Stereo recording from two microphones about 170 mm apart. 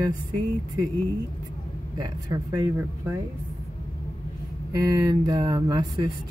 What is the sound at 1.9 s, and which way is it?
Speech, 25° right (ahead or behind).